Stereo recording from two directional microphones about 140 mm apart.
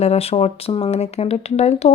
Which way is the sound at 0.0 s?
45° left (ahead or behind).